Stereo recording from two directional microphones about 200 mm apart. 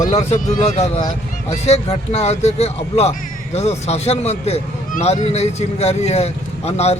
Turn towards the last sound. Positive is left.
turn(degrees=30)  # may be behind; listen again after turning